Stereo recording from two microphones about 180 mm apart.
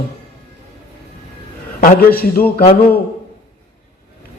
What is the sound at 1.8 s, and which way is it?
Speech, 55° left (ahead or behind).